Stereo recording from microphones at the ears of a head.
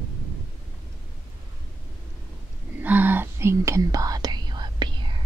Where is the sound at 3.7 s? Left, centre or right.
Right.